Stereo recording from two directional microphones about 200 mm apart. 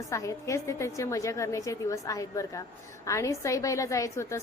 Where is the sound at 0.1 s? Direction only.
15° left (ahead or behind).